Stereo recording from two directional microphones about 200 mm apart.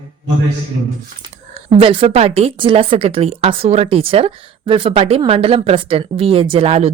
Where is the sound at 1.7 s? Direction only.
25° right (ahead or behind).